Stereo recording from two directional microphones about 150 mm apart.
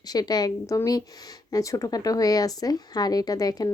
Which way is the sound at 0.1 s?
25° left (ahead or behind).